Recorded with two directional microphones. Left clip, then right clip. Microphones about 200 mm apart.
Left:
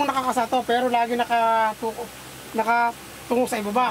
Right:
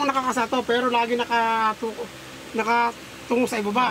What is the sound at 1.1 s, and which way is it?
Speech, 15° left (ahead or behind).